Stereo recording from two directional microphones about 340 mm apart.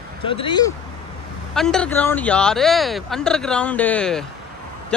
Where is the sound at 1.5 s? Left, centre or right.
Centre.